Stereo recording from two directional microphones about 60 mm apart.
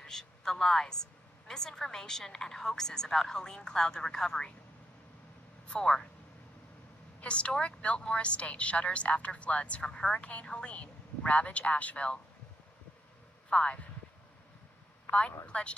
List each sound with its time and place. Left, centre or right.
0.0 s a woman's voice: centre
5.7 s a woman's voice: centre
7.2 s a woman's voice: centre
13.5 s speech: centre
15.0 s a man's voice: centre